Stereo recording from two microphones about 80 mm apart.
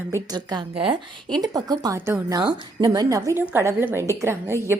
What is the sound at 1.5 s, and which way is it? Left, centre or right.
A woman's voice, right.